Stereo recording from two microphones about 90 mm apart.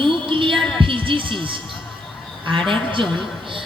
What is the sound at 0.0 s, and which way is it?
Music, 70° right (ahead or behind).